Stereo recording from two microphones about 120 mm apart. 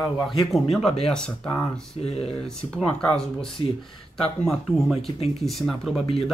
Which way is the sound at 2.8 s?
5° left (ahead or behind).